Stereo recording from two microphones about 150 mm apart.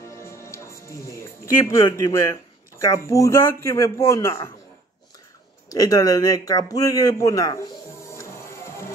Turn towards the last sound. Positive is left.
turn(degrees=25)  # may be behind; listen again after turning